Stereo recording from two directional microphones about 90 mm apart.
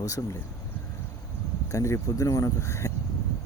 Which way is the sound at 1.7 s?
35° left (ahead or behind).